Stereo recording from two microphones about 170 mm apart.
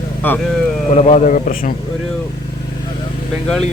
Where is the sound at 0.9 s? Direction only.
40° left (ahead or behind).